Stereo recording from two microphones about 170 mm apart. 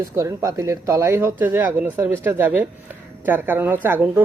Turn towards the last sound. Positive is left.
turn(degrees=-10)  # may be behind; listen again after turning